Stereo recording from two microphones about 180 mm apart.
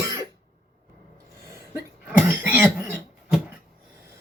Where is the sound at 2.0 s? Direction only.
10° right (ahead or behind).